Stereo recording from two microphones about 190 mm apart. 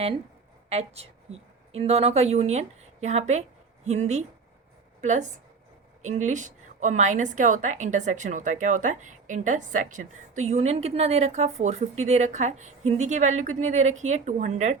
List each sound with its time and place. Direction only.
1.7 s a woman's voice: 35° right (ahead or behind)